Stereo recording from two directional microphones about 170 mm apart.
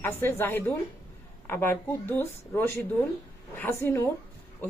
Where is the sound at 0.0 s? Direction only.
15° left (ahead or behind).